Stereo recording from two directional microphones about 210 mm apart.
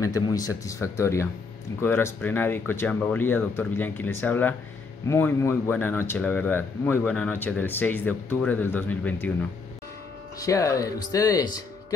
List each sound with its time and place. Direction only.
0.0 s speech: 15° left (ahead or behind)